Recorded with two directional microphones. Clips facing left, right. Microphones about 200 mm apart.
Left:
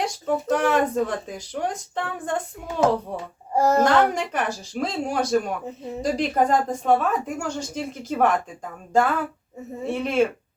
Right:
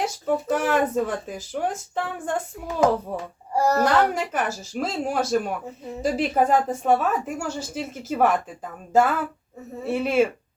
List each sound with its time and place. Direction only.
0.0 s speech: 5° right (ahead or behind)
3.5 s a child's voice: 20° left (ahead or behind)
3.8 s speech: 5° right (ahead or behind)